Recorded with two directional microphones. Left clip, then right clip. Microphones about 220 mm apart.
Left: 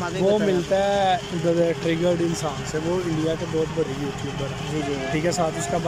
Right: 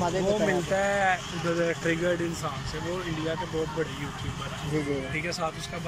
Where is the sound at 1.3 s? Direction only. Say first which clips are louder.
Left 7 dB; 30° left (ahead or behind).